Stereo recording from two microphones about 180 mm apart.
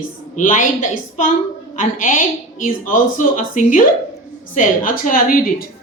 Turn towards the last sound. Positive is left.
turn(degrees=50)  # may be behind; listen again after turning